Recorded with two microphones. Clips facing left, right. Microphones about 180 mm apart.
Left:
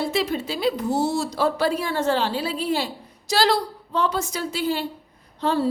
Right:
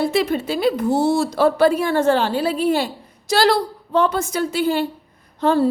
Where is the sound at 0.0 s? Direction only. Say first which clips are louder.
Right 5 dB; 55° right (ahead or behind).